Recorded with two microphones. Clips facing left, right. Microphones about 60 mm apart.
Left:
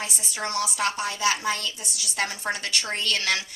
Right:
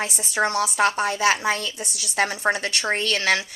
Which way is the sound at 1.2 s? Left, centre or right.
Right.